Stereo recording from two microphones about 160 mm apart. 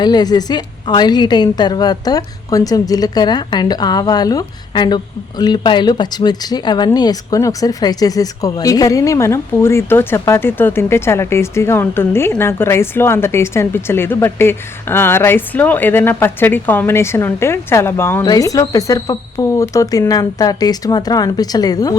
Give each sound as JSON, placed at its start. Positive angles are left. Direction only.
{"t": 0.0, "sound": "a woman's voice", "side_deg": 25}